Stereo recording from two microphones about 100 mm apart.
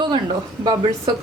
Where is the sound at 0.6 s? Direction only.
40° right (ahead or behind).